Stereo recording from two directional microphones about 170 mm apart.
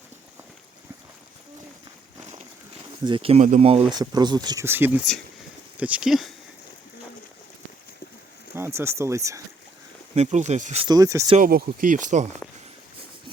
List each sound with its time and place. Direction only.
3.0 s speech: 30° right (ahead or behind)
3.9 s speech: 25° right (ahead or behind); by 6.3 s centre (ahead or behind)
8.5 s speech: 15° right (ahead or behind)
10.2 s speech: 40° right (ahead or behind)
10.8 s speech: 20° right (ahead or behind)
11.3 s speech: 60° right (ahead or behind)